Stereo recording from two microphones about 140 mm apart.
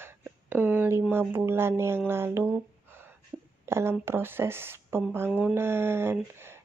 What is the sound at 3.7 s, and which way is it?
Speech, 20° right (ahead or behind).